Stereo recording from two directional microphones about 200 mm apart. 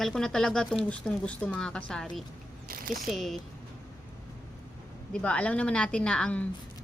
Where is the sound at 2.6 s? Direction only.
45° right (ahead or behind).